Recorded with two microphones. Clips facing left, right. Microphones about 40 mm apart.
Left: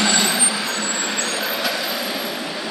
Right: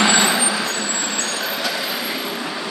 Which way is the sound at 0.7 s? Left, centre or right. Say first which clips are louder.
Even; centre.